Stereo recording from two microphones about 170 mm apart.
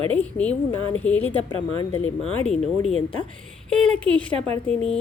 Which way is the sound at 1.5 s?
25° left (ahead or behind).